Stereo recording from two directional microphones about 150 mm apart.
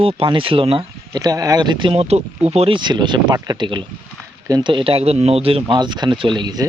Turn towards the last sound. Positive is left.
turn(degrees=-30)  # may be behind; listen again after turning